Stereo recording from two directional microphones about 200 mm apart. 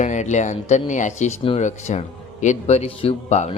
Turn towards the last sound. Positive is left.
turn(degrees=35)  # may be behind; listen again after turning